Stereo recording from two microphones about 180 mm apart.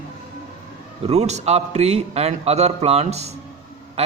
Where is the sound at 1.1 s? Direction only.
40° right (ahead or behind).